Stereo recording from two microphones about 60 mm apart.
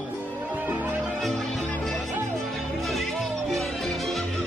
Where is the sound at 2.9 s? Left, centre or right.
Centre.